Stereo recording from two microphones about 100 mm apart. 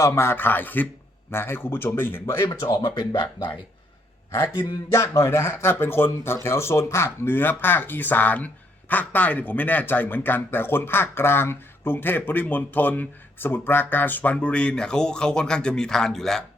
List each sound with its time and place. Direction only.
0.0 s speech: 25° left (ahead or behind)
2.5 s speech: 40° left (ahead or behind)
3.1 s speech: 55° left (ahead or behind)
4.9 s speech: 30° left (ahead or behind); by 16.4 s 5° left (ahead or behind)